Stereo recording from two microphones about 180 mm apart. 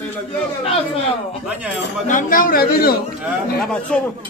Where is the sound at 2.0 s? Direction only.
50° left (ahead or behind).